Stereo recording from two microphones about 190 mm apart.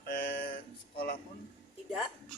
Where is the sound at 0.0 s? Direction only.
55° left (ahead or behind).